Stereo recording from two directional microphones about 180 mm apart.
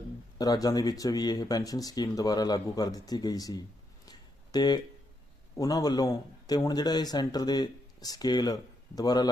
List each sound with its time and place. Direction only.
0.3 s speech: 20° left (ahead or behind)
4.0 s a sound: 20° left (ahead or behind)
5.5 s speech: 20° left (ahead or behind)